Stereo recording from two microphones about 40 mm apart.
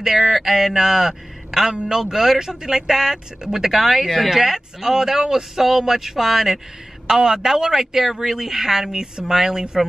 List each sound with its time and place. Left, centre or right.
0.0 s speech: centre